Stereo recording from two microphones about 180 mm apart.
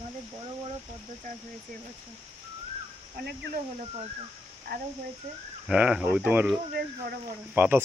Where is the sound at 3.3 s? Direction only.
65° right (ahead or behind).